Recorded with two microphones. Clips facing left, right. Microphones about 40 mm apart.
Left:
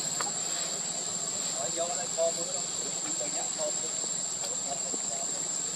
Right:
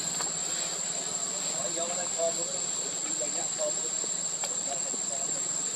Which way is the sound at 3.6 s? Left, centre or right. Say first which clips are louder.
Right 2 dB; centre.